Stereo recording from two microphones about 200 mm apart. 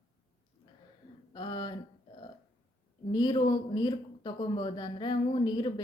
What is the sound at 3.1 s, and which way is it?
Speech, 20° left (ahead or behind).